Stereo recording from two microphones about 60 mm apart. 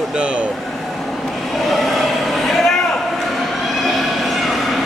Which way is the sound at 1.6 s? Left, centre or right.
Centre.